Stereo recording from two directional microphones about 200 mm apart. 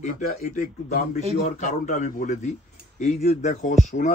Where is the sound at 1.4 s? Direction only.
40° left (ahead or behind).